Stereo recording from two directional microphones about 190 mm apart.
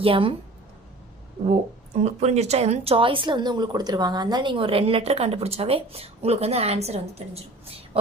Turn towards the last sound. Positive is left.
turn(degrees=-35)  # may be behind; listen again after turning